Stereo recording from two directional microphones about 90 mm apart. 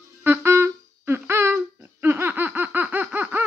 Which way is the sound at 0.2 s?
25° right (ahead or behind).